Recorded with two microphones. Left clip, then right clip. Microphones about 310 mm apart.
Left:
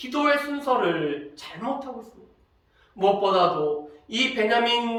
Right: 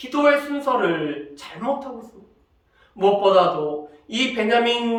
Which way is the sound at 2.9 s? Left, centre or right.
Centre.